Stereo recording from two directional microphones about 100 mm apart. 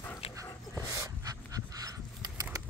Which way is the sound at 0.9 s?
35° right (ahead or behind).